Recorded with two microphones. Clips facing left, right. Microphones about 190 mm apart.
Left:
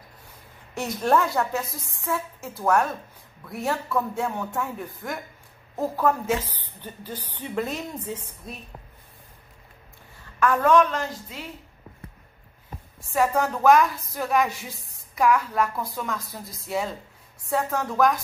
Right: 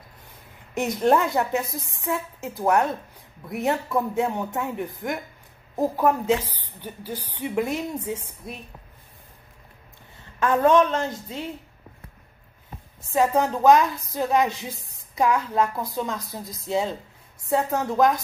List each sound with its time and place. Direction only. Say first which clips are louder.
0.7 s a woman's voice: right 2 dB; 20° right (ahead or behind)
10.4 s a woman's voice: right 1 dB; 25° right (ahead or behind)
13.1 s a woman's voice: right 2 dB; 20° right (ahead or behind)